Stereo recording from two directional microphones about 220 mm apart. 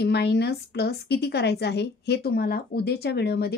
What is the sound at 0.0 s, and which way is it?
A woman's voice, 50° left (ahead or behind).